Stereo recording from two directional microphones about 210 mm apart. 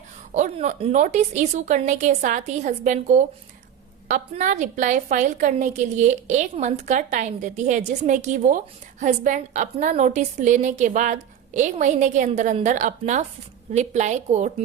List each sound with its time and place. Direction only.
0.3 s a woman's voice: 35° right (ahead or behind)